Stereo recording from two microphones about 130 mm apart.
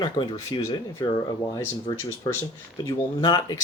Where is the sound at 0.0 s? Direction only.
35° left (ahead or behind).